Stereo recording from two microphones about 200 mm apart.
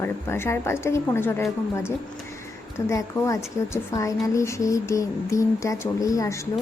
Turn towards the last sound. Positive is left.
turn(degrees=15)  # may be behind; listen again after turning